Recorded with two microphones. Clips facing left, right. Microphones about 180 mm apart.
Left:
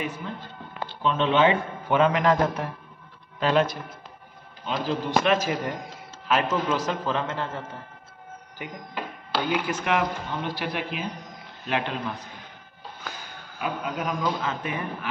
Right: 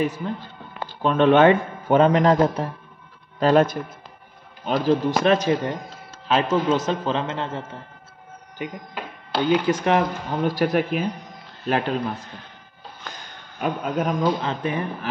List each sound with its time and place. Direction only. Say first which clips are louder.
0.0 s a man's voice: right 7 dB; 40° right (ahead or behind); by 7.6 s 20° right (ahead or behind)
9.5 s a man's voice: right 7 dB; 30° right (ahead or behind)
13.0 s music: even; 5° left (ahead or behind)
13.6 s a man's voice: right 6 dB; 45° right (ahead or behind)
14.2 s speech: right 5 dB; 35° right (ahead or behind)